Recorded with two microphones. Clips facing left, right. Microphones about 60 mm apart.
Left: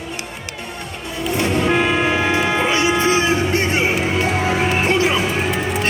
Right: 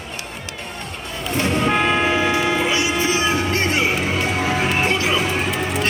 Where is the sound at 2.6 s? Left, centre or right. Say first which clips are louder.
Left 3 dB; left.